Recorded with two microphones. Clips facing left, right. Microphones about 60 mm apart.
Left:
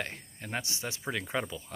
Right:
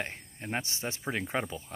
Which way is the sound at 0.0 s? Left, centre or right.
Right.